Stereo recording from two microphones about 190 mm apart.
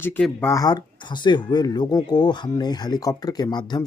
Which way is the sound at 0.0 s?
10° left (ahead or behind).